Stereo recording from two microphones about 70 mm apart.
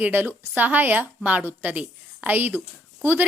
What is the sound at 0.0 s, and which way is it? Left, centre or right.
A woman's voice, right.